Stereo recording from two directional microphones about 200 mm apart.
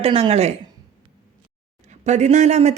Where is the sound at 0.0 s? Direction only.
30° right (ahead or behind).